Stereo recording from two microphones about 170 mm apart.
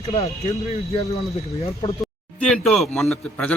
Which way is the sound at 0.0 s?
35° left (ahead or behind).